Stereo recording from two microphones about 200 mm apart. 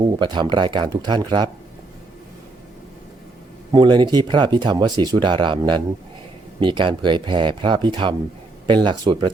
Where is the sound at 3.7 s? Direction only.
20° right (ahead or behind).